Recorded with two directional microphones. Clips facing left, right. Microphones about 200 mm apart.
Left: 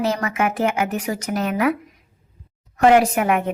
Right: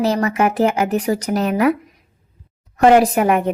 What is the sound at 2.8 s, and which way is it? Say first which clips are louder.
Speech: right 3 dB; 35° right (ahead or behind).